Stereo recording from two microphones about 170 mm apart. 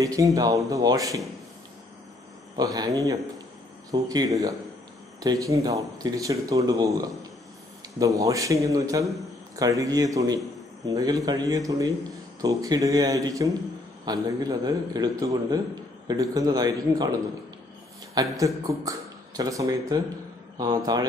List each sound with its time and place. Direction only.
0.0 s a man's voice: 20° right (ahead or behind)
2.5 s a man's voice: 20° right (ahead or behind)
18.4 s a man's voice: 20° right (ahead or behind)